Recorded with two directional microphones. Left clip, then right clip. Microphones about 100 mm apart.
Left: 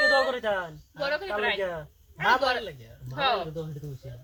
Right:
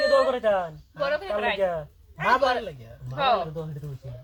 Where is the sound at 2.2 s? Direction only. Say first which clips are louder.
Right 2 dB; 5° left (ahead or behind).